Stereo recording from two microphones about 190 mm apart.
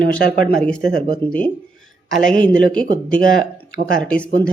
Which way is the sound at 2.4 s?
5° left (ahead or behind).